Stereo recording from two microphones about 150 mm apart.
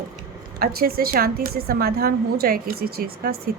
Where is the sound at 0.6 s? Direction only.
90° right.